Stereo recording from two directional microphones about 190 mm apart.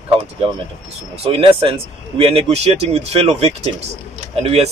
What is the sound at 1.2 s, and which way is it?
Speech, 30° right (ahead or behind).